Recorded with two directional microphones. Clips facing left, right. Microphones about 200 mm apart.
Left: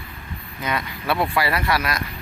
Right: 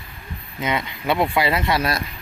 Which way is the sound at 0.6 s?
20° right (ahead or behind).